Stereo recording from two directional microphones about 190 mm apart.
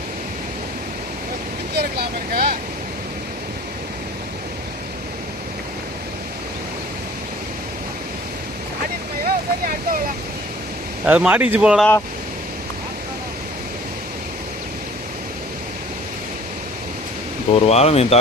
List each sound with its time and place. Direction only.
1.7 s vehicle: 55° right (ahead or behind)
9.2 s speech: 50° right (ahead or behind)
11.0 s speech: 5° right (ahead or behind)
17.5 s speech: 35° left (ahead or behind)